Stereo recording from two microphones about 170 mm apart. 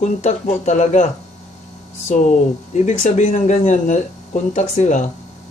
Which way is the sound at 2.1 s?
45° left (ahead or behind).